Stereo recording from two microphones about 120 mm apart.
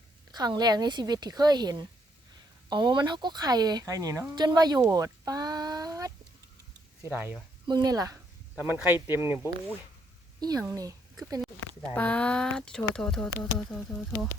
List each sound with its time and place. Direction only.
0.3 s speech: 35° right (ahead or behind)
7.1 s speech: 15° right (ahead or behind)
7.7 s speech: 35° right (ahead or behind)
8.5 s speech: 15° right (ahead or behind)
10.4 s speech: 30° right (ahead or behind)
11.9 s speech: 10° left (ahead or behind)